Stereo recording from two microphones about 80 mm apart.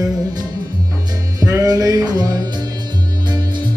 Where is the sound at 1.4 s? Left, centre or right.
Right.